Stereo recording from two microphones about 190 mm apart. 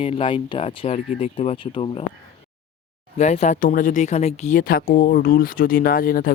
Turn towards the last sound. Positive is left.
turn(degrees=50)  # may be behind; listen again after turning